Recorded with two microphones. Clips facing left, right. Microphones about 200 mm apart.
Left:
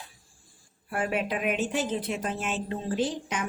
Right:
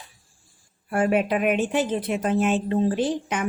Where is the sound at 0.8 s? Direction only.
50° right (ahead or behind).